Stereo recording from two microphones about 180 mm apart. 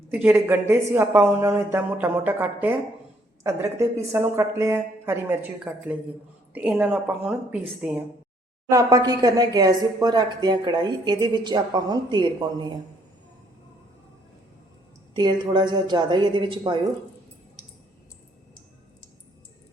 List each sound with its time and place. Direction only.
0.1 s a woman's voice: 10° right (ahead or behind)
8.7 s speech: 20° right (ahead or behind)
15.1 s speech: 25° right (ahead or behind)